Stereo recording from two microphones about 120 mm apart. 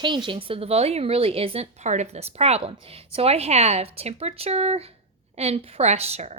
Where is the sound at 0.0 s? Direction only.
40° right (ahead or behind).